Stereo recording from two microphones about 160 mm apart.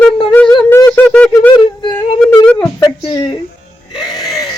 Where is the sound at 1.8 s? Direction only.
30° left (ahead or behind).